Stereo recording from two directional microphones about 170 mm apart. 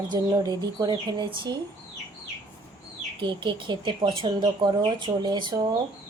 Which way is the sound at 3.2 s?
30° right (ahead or behind).